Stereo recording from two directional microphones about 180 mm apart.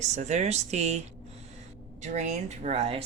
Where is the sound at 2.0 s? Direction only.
40° right (ahead or behind).